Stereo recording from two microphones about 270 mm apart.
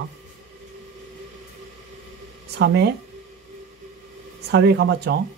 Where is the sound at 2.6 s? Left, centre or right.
Right.